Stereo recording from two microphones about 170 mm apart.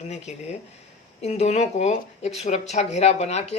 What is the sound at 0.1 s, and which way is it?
Speech, 40° left (ahead or behind).